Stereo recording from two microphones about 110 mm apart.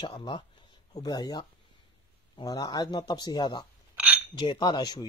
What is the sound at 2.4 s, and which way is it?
Speech, 35° left (ahead or behind).